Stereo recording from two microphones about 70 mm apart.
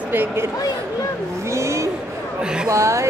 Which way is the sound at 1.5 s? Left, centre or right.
Right.